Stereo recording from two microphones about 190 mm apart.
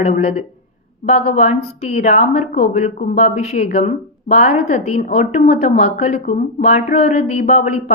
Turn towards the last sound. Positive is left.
turn(degrees=35)  # may be behind; listen again after turning